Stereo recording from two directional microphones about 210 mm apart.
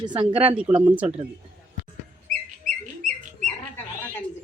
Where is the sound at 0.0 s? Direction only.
20° right (ahead or behind).